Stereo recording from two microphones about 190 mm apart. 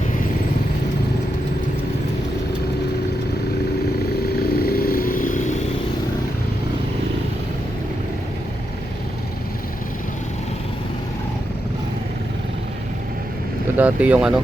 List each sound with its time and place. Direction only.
4.4 s vehicle: 55° left (ahead or behind)
13.7 s speech: 5° right (ahead or behind)